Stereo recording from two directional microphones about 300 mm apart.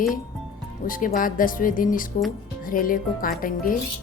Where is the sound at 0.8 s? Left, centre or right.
Left.